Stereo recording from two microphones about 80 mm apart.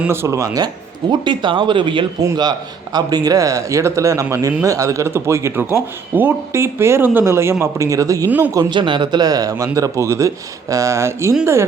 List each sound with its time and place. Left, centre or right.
0.1 s speech: right
1.2 s speech: right
2.3 s speech: right
8.7 s speech: right